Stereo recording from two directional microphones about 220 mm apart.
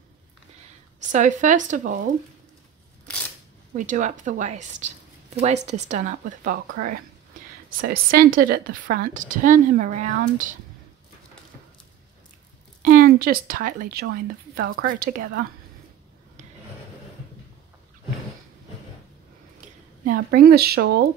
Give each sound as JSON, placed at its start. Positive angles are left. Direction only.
{"t": 1.1, "sound": "a woman's voice", "side_deg": -35}
{"t": 3.7, "sound": "a woman's voice", "side_deg": -35}
{"t": 12.8, "sound": "a woman's voice", "side_deg": -40}
{"t": 20.1, "sound": "speech", "side_deg": -40}